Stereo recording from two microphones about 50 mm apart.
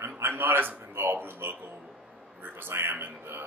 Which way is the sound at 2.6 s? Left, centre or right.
Right.